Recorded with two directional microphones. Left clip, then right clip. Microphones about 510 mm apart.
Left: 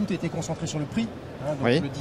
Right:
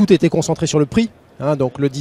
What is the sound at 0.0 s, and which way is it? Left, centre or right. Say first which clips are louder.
Speech: right 16 dB; centre.